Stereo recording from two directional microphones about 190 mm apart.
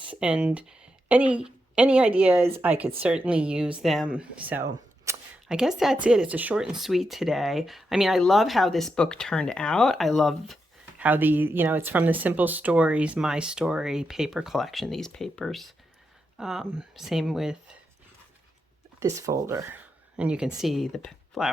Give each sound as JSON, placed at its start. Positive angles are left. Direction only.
{"t": 0.1, "sound": "speech", "side_deg": -5}
{"t": 5.1, "sound": "a sound", "side_deg": -15}
{"t": 5.5, "sound": "speech", "side_deg": -5}
{"t": 18.9, "sound": "speech", "side_deg": -15}